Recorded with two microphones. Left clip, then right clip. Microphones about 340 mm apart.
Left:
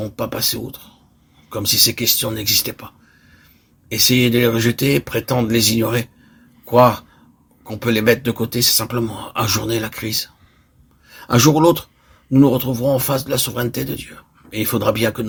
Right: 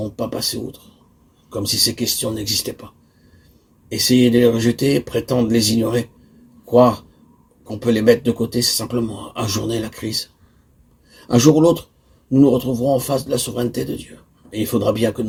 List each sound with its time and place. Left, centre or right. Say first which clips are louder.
0.2 s speech: left 2 dB; left
3.8 s speech: even; left